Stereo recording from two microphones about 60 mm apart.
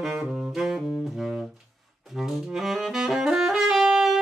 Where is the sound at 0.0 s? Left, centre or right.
Centre.